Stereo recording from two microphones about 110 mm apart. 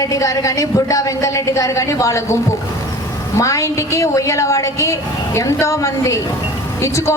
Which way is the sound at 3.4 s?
25° left (ahead or behind).